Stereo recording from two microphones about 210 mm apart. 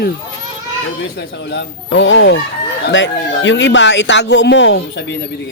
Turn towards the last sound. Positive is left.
turn(degrees=55)  # may be behind; listen again after turning